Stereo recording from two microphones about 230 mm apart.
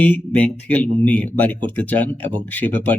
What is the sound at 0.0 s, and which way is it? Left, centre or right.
Speech, centre.